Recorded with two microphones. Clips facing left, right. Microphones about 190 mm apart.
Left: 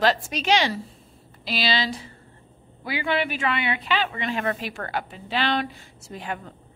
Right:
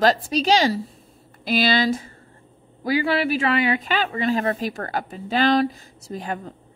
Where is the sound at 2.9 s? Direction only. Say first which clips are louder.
Right 5 dB; 35° right (ahead or behind).